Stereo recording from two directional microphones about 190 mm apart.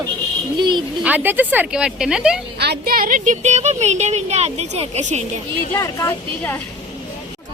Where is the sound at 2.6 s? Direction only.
55° right (ahead or behind); by 5.2 s 35° right (ahead or behind).